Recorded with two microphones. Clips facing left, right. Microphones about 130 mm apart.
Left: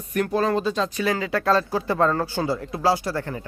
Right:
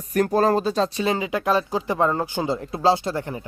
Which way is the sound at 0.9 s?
25° right (ahead or behind).